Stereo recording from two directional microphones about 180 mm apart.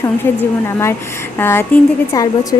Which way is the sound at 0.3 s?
10° left (ahead or behind).